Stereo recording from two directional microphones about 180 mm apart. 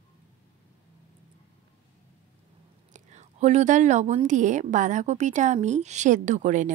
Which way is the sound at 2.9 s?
40° right (ahead or behind).